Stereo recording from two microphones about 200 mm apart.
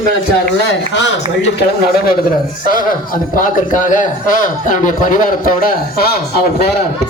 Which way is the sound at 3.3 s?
40° left (ahead or behind).